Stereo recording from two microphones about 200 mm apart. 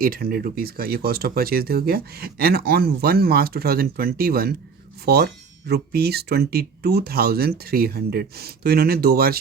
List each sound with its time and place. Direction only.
0.0 s speech: 45° right (ahead or behind)